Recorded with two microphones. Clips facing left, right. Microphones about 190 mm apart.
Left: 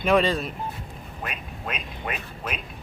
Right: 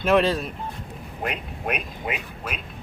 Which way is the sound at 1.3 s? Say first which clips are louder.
Right 6 dB; 60° right (ahead or behind).